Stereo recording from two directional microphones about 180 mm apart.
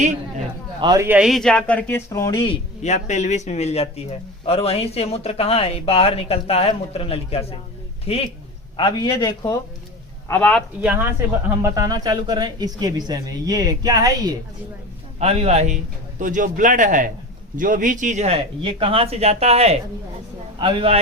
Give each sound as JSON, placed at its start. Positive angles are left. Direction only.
{"t": 0.8, "sound": "speech", "side_deg": -20}
{"t": 1.0, "sound": "speech", "side_deg": -5}
{"t": 2.8, "sound": "speech", "side_deg": 40}
{"t": 10.2, "sound": "a man's voice", "side_deg": 10}
{"t": 10.8, "sound": "speech", "side_deg": -10}
{"t": 15.2, "sound": "a man's voice", "side_deg": -35}
{"t": 18.6, "sound": "speech", "side_deg": -30}